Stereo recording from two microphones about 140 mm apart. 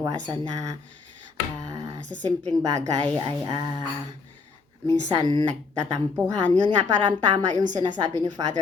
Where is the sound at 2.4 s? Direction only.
25° right (ahead or behind).